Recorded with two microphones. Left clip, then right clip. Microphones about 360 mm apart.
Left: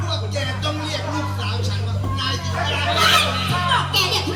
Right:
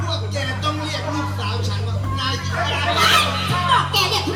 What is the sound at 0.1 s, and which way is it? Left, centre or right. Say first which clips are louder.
Music: even; centre.